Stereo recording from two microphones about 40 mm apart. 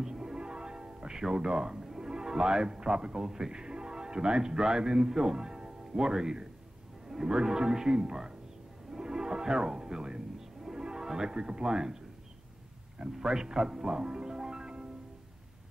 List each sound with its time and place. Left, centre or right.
0.0 s music: centre
7.1 s a man's voice: centre
8.9 s music: centre
13.1 s speech: centre